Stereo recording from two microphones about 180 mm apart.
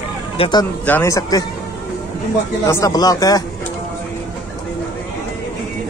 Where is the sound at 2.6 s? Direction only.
20° left (ahead or behind).